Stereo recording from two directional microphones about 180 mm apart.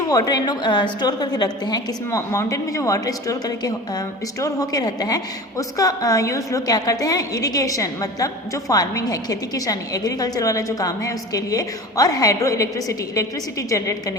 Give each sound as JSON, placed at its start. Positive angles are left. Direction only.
{"t": 0.1, "sound": "a woman's voice", "side_deg": 20}